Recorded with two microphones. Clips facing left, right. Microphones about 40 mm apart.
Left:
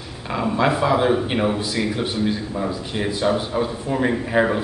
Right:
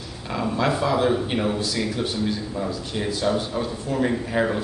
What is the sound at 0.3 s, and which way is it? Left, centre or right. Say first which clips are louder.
A man's voice: left 3 dB; centre.